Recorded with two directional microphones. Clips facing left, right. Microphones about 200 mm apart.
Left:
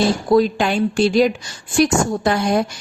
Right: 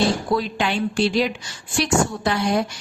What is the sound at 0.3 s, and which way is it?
A woman's voice, 45° left (ahead or behind).